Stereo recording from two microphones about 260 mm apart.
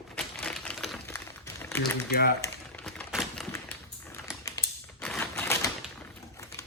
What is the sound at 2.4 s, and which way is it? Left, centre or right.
Typewriter, centre.